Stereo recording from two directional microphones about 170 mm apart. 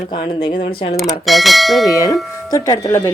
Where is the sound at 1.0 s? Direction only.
Centre (ahead or behind).